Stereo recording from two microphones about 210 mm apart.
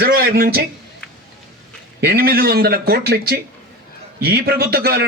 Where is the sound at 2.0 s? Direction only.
45° right (ahead or behind).